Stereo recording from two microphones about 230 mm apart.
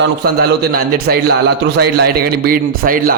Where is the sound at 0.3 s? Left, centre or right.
Right.